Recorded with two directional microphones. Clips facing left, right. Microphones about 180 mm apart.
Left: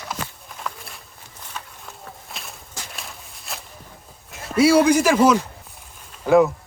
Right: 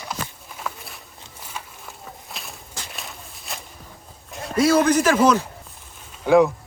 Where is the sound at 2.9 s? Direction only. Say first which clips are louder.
Right 1 dB; centre (ahead or behind).